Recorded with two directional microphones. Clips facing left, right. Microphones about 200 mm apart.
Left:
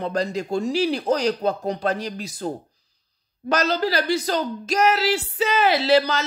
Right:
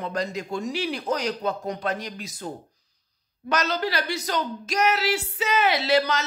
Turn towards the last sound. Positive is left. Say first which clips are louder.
# left 4 dB
turn(degrees=35)  # may be behind; listen again after turning